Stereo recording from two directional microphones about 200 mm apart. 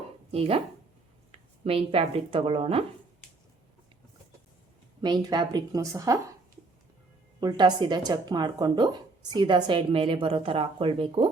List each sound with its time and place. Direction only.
0.3 s speech: 30° right (ahead or behind)
5.0 s speech: 20° right (ahead or behind)
7.3 s speech: 20° right (ahead or behind)